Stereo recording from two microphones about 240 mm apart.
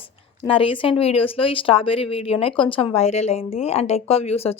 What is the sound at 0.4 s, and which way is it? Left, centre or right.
Speech, left.